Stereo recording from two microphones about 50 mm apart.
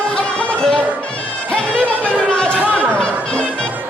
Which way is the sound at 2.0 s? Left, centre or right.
Centre.